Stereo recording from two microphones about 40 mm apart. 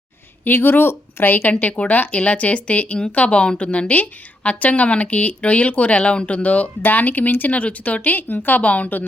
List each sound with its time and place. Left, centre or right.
0.4 s speech: left
1.5 s a woman's voice: left
8.6 s a woman's voice: left